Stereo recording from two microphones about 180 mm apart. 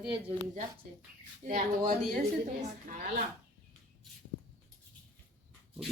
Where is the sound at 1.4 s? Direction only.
45° right (ahead or behind).